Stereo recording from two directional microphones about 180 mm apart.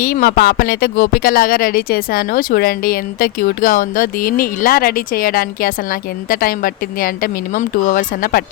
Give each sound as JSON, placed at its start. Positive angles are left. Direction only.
{"t": 0.0, "sound": "speech", "side_deg": 55}